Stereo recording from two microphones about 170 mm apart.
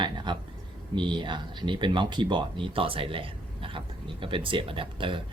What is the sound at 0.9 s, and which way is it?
Speech, 25° right (ahead or behind).